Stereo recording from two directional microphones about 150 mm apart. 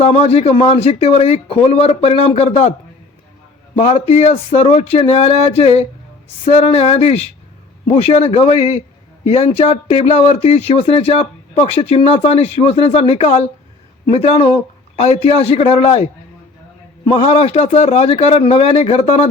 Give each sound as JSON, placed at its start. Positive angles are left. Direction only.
{"t": 0.0, "sound": "speech", "side_deg": 40}
{"t": 3.8, "sound": "speech", "side_deg": 45}
{"t": 17.2, "sound": "speech", "side_deg": 45}